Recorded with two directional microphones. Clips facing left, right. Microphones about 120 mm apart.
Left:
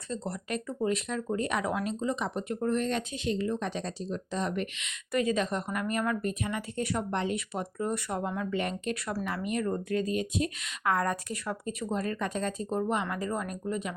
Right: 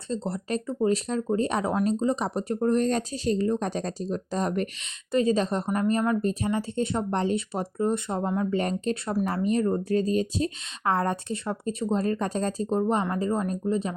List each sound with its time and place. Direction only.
0.1 s speech: 30° right (ahead or behind)